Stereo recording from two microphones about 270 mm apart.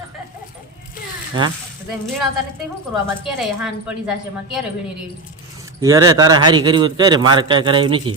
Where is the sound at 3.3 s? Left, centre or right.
Centre.